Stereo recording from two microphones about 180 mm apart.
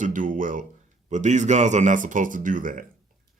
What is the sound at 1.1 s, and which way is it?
Speech, 40° right (ahead or behind).